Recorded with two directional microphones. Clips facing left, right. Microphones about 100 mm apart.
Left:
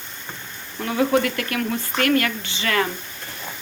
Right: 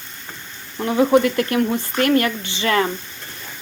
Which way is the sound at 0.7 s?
30° right (ahead or behind).